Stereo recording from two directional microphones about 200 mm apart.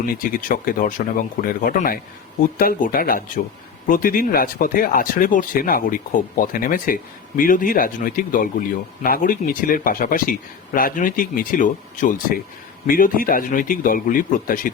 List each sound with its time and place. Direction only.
0.0 s speech: 45° left (ahead or behind)